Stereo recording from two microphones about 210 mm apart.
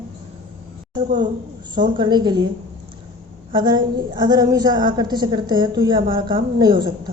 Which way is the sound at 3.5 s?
20° right (ahead or behind).